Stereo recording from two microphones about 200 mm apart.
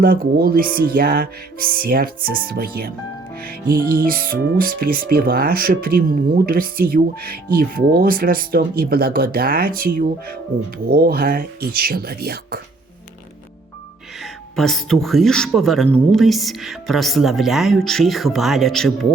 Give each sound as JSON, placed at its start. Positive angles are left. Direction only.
{"t": 0.0, "sound": "speech", "side_deg": -45}
{"t": 14.5, "sound": "speech", "side_deg": 0}